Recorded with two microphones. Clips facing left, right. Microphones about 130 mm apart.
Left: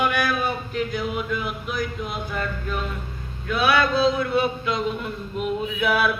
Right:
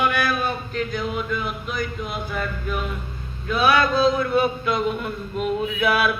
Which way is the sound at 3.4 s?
40° right (ahead or behind).